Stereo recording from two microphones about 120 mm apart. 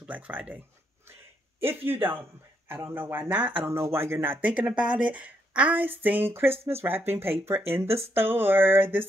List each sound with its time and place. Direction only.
0.0 s speech: 10° right (ahead or behind)
1.6 s speech: 20° right (ahead or behind)